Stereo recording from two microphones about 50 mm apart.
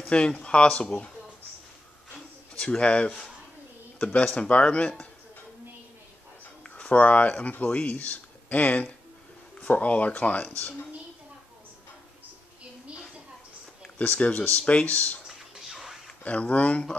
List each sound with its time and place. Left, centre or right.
0.1 s speech: left
2.6 s speech: centre
6.8 s speech: left
13.8 s speech: left
15.2 s a sound: centre
16.3 s speech: left